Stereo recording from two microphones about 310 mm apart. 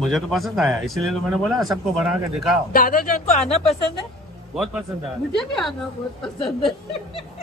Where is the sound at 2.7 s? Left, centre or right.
Left.